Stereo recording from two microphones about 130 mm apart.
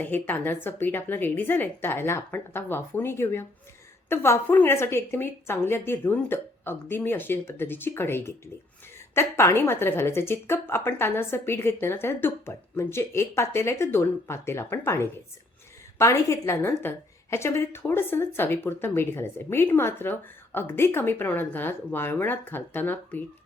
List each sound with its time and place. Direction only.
0.0 s a woman's voice: 15° left (ahead or behind)